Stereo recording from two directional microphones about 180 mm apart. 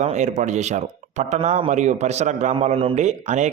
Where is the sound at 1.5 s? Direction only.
40° right (ahead or behind).